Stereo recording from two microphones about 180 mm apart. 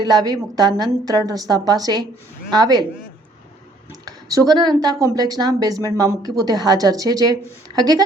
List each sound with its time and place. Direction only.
0.0 s a woman's voice: 20° right (ahead or behind)
4.0 s a woman's voice: 20° right (ahead or behind)